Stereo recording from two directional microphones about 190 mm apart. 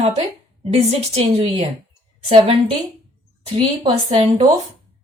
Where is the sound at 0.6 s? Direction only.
35° right (ahead or behind).